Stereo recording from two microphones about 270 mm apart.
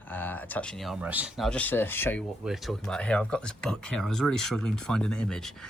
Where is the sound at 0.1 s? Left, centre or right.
Centre.